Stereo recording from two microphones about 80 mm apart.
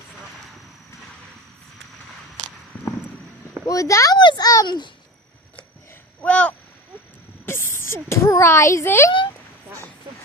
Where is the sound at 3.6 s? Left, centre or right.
Left.